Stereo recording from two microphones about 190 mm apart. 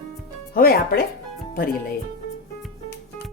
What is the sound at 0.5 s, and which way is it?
Speech, 50° left (ahead or behind).